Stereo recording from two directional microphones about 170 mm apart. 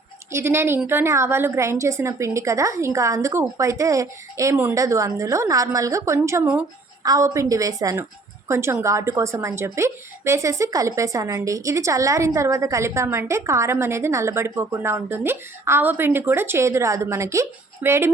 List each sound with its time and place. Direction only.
0.3 s speech: 15° right (ahead or behind)